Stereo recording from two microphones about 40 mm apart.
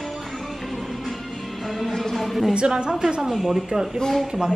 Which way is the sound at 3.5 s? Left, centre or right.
Centre.